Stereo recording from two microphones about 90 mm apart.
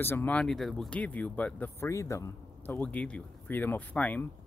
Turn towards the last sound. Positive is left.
turn(degrees=15)  # may be behind; listen again after turning